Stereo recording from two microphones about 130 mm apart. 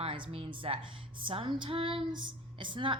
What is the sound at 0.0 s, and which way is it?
A woman's voice, 45° right (ahead or behind).